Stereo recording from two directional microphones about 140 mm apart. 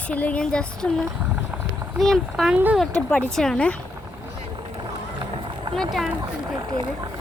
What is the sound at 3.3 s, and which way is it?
Speech, 5° left (ahead or behind).